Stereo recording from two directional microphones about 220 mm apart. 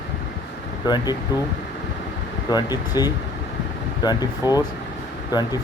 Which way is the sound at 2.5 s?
20° left (ahead or behind).